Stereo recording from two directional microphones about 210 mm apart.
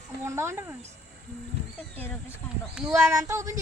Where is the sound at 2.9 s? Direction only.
15° right (ahead or behind).